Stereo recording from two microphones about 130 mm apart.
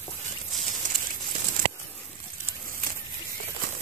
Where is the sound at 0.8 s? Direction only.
80° right.